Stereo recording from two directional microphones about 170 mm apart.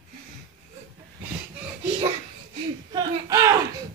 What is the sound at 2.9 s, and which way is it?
Speech, 25° right (ahead or behind).